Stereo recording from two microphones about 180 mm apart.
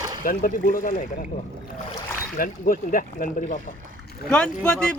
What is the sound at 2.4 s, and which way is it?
Speech, 50° left (ahead or behind).